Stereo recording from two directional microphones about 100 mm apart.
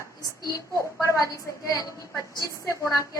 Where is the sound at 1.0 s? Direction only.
30° left (ahead or behind).